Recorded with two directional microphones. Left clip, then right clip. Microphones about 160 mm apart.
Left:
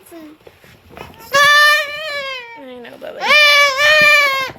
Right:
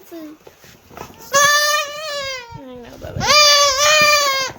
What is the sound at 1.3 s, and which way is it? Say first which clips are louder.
Goat: left 4 dB; 10° left (ahead or behind).